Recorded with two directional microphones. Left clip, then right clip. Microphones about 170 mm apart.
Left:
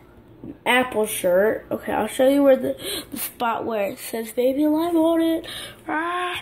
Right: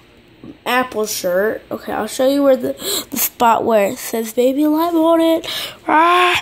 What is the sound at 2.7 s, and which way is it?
Speech, 40° right (ahead or behind).